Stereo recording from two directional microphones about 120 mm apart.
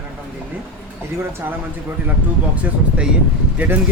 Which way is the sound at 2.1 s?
10° right (ahead or behind).